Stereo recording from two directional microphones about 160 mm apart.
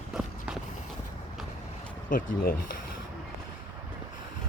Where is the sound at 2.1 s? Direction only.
60° left (ahead or behind).